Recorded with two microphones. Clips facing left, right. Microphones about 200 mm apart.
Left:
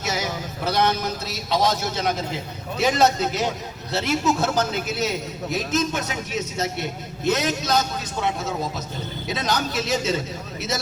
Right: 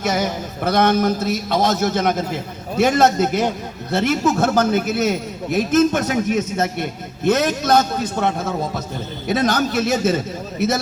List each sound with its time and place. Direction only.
0.0 s a man's voice: 55° right (ahead or behind)